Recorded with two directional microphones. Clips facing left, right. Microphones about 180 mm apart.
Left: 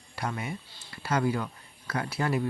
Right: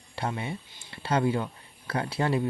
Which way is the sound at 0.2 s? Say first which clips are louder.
Right 2 dB; 25° right (ahead or behind).